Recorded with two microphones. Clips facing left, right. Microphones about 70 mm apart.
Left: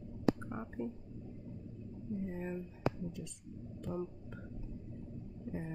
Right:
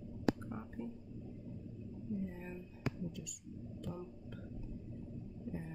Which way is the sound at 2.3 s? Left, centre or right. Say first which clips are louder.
Left 7 dB; left.